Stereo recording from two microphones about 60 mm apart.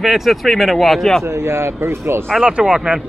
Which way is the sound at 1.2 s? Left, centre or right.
Right.